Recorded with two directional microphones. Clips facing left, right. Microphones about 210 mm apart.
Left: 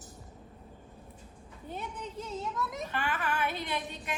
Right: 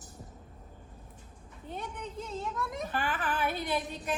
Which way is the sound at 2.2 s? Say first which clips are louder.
Left 1 dB; centre (ahead or behind).